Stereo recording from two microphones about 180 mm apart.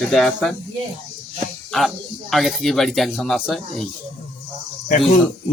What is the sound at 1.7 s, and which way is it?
Speech, centre (ahead or behind).